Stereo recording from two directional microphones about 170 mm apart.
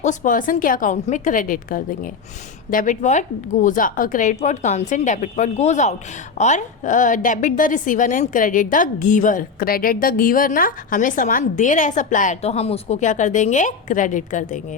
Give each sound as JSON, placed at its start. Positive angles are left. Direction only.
{"t": 0.0, "sound": "a woman's voice", "side_deg": 50}